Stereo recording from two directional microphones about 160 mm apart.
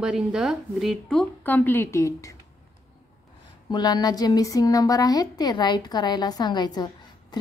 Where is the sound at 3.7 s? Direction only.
25° left (ahead or behind).